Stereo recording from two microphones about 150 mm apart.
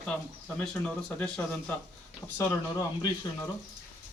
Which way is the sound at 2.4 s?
25° left (ahead or behind).